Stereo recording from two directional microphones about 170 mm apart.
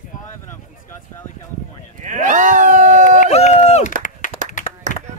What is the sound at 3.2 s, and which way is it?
Run, 40° left (ahead or behind).